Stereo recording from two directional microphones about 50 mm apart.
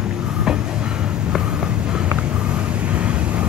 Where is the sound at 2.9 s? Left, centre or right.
Right.